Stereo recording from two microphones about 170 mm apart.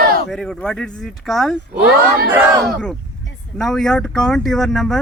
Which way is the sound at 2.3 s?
15° right (ahead or behind).